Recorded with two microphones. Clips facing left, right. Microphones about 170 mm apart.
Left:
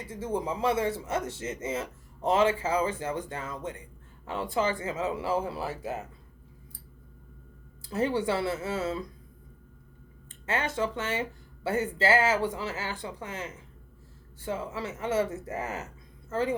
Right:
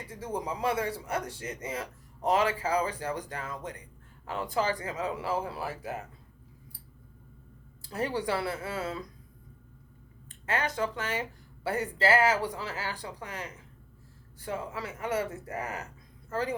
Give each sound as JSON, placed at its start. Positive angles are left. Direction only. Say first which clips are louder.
{"t": 0.1, "sound": "speech", "louder": "left 4 dB", "side_deg": 25}
{"t": 7.9, "sound": "speech", "louder": "left 3 dB", "side_deg": 25}
{"t": 10.4, "sound": "speech", "louder": "left 1 dB", "side_deg": 25}